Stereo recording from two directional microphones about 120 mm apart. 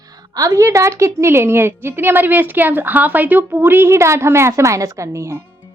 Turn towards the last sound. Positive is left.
turn(degrees=-20)  # may be behind; listen again after turning